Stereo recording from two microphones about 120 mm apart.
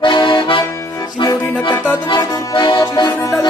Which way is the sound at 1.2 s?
35° left (ahead or behind).